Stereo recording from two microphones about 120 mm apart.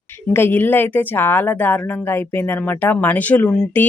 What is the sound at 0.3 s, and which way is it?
A woman's voice, 20° left (ahead or behind).